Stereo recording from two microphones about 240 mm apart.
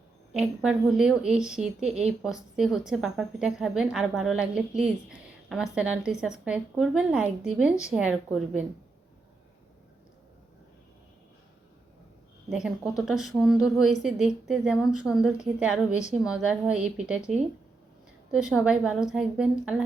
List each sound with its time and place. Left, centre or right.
0.3 s speech: centre
12.5 s speech: centre